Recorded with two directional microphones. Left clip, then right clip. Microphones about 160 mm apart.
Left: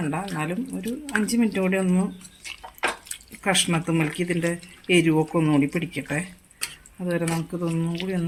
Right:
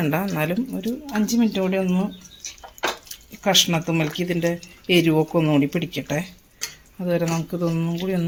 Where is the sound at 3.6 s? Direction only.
15° right (ahead or behind).